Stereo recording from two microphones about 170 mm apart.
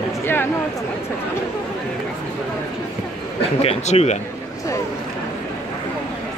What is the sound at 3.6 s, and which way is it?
Speech, 40° left (ahead or behind).